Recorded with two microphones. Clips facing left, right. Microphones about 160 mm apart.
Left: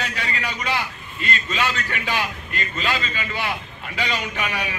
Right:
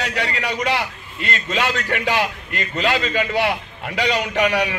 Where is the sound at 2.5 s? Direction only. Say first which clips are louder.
Right 5 dB; 75° right (ahead or behind).